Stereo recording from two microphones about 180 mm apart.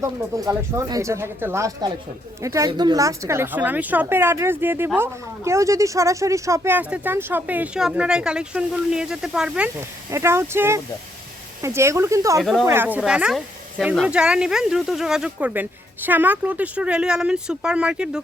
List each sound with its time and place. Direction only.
0.0 s speech: 15° right (ahead or behind)
10.1 s speech: 15° right (ahead or behind)
12.4 s speech: centre (ahead or behind)
12.6 s speech: 10° right (ahead or behind)